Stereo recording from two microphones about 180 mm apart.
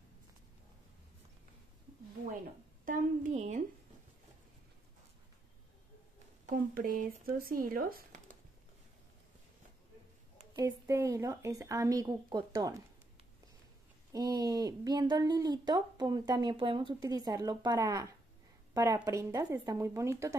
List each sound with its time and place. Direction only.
2.8 s speech: 45° right (ahead or behind)
6.4 s speech: 55° right (ahead or behind)
10.5 s speech: 15° right (ahead or behind)
14.1 s speech: 20° right (ahead or behind)